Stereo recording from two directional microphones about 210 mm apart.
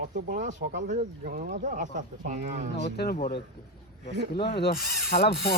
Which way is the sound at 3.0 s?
45° left (ahead or behind).